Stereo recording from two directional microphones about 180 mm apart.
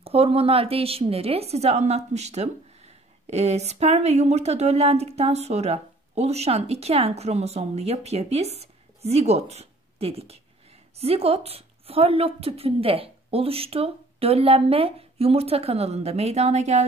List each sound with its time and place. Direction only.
0.0 s a woman's voice: 35° right (ahead or behind)